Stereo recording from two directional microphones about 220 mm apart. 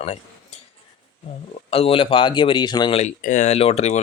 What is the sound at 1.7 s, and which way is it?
Speech, 25° left (ahead or behind).